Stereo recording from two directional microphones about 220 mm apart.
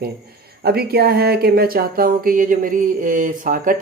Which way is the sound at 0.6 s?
45° right (ahead or behind).